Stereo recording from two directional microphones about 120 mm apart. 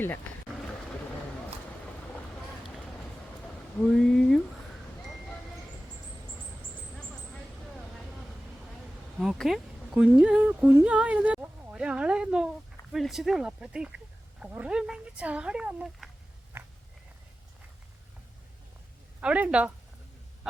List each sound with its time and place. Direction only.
3.9 s a sound: 5° left (ahead or behind)
9.1 s speech: centre (ahead or behind)
16.5 s biting: 20° right (ahead or behind)
19.2 s speech: 10° right (ahead or behind)